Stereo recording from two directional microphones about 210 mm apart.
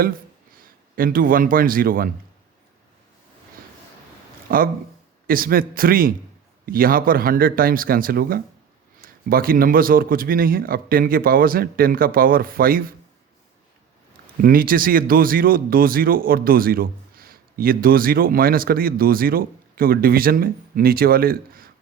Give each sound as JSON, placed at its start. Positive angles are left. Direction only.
{"t": 0.9, "sound": "speech", "side_deg": -40}
{"t": 4.4, "sound": "speech", "side_deg": -45}
{"t": 14.4, "sound": "speech", "side_deg": -45}